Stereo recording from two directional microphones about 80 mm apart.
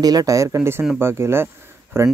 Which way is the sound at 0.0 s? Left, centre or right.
Right.